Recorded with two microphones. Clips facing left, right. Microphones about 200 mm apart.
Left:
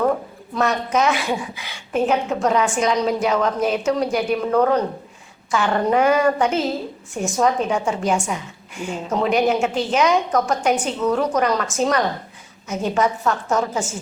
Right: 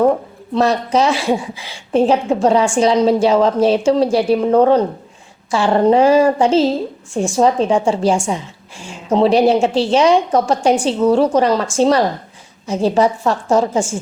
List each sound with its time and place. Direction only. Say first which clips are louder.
0.5 s a woman's voice: right 5 dB; 30° right (ahead or behind)